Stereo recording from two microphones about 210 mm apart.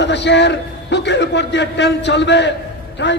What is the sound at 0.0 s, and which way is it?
A man's voice, 55° left (ahead or behind).